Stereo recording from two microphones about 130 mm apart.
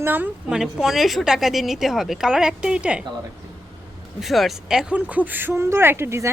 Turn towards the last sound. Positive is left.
turn(degrees=-20)  # may be behind; listen again after turning